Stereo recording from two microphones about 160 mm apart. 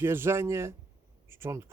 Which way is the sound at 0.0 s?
15° right (ahead or behind).